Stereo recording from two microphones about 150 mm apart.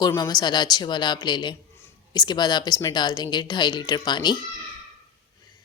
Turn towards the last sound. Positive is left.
turn(degrees=30)  # may be behind; listen again after turning